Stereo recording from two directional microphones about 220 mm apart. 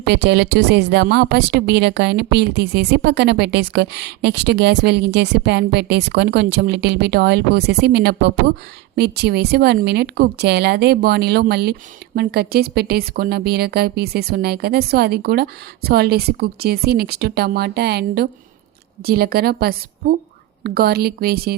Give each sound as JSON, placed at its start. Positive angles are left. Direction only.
{"t": 0.0, "sound": "a woman's voice", "side_deg": -50}